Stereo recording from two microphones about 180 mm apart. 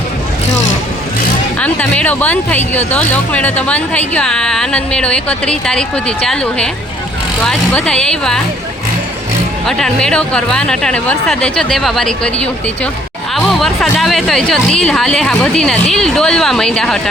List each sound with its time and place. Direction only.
0.4 s vehicle: 90° left
1.5 s a woman's voice: 10° left (ahead or behind)
9.6 s a woman's voice: 5° left (ahead or behind)